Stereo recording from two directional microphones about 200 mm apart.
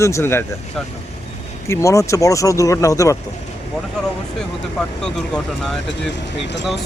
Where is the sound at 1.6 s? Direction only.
15° left (ahead or behind).